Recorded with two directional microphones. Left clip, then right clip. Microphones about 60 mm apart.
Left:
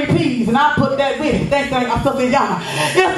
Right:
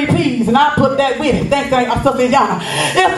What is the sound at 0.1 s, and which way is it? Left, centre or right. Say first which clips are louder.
Speech: right 3 dB; right.